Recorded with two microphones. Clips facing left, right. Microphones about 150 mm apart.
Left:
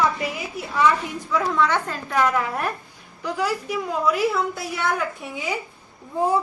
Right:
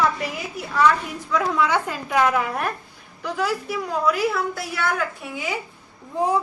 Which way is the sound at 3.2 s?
10° left (ahead or behind).